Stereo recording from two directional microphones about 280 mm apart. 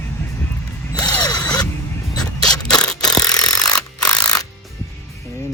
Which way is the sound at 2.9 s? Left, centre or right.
Centre.